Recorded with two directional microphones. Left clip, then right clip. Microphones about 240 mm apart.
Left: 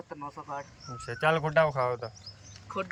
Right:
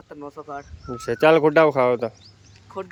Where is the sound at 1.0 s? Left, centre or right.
Right.